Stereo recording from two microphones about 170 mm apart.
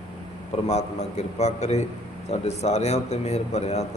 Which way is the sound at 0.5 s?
40° left (ahead or behind).